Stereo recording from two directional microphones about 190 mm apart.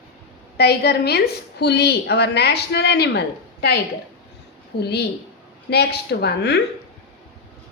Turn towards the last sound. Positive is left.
turn(degrees=60)  # may be behind; listen again after turning